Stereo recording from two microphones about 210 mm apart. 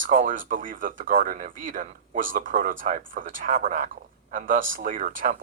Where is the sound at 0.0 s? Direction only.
40° right (ahead or behind).